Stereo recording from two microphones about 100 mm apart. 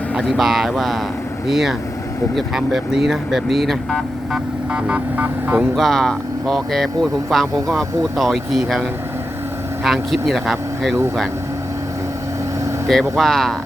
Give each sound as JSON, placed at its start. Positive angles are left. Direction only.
{"t": 0.2, "sound": "speech", "side_deg": 0}
{"t": 4.7, "sound": "speech", "side_deg": -15}
{"t": 5.7, "sound": "speech", "side_deg": 0}
{"t": 9.8, "sound": "speech", "side_deg": 0}
{"t": 12.9, "sound": "speech", "side_deg": 0}